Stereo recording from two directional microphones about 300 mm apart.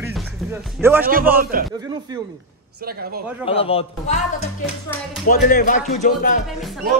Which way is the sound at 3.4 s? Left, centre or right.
Centre.